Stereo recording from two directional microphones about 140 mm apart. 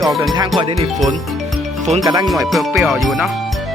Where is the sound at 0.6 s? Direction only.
45° right (ahead or behind).